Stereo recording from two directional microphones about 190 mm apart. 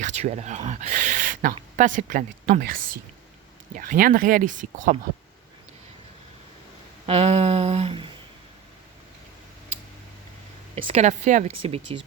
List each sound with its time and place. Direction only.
0.0 s speech: 35° right (ahead or behind)
7.1 s speech: 35° right (ahead or behind)
10.8 s speech: 30° right (ahead or behind)